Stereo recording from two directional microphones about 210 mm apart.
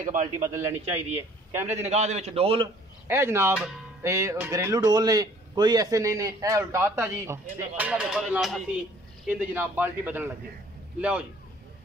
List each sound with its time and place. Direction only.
0.0 s a man's voice: 35° right (ahead or behind)
0.4 s a man's voice: 15° right (ahead or behind)
1.8 s a man's voice: 30° right (ahead or behind)
3.1 s a man's voice: 10° right (ahead or behind)